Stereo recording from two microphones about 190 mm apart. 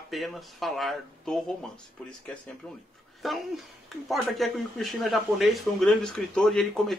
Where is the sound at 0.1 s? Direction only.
Centre (ahead or behind).